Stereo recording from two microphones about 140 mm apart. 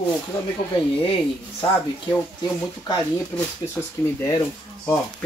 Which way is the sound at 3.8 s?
15° left (ahead or behind).